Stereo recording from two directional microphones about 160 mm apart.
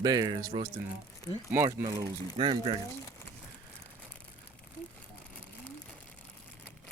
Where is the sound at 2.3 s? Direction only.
35° right (ahead or behind).